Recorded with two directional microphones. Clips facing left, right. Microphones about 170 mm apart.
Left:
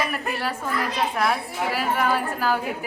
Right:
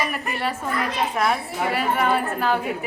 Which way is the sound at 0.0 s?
Centre (ahead or behind).